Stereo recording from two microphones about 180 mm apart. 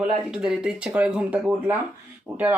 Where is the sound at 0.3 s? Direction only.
5° right (ahead or behind).